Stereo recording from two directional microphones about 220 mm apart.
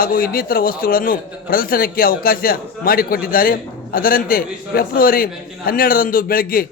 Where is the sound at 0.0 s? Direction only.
40° left (ahead or behind).